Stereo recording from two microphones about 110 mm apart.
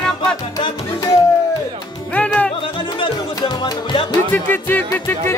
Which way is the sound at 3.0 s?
40° left (ahead or behind).